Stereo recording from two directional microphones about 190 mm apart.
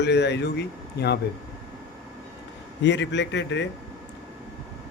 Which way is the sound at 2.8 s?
65° left (ahead or behind).